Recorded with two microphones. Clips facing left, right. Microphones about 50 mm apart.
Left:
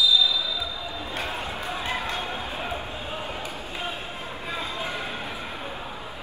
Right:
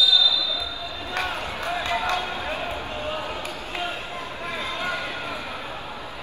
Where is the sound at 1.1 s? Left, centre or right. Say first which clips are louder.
Right 4 dB; right.